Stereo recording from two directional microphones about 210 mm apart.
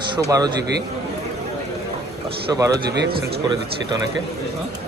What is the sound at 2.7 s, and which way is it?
Speech, 50° right (ahead or behind).